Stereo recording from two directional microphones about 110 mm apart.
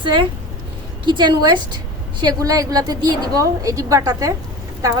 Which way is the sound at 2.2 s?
30° right (ahead or behind).